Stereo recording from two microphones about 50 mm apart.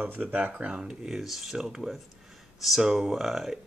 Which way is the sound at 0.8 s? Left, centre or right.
Centre.